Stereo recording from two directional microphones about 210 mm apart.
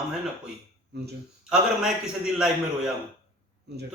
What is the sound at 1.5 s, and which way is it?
A man's voice, 5° right (ahead or behind).